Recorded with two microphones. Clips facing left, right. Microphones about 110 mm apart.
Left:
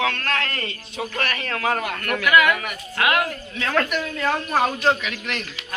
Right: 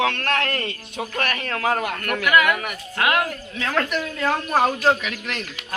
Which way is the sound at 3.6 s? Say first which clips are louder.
Left 1 dB; 15° right (ahead or behind).